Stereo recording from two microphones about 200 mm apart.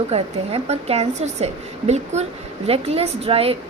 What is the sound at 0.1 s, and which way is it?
A woman's voice, 30° right (ahead or behind).